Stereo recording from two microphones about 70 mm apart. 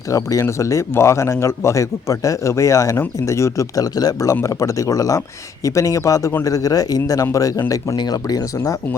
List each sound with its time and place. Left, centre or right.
0.1 s speech: left
3.8 s speech: left
7.9 s speech: left
8.5 s speech: left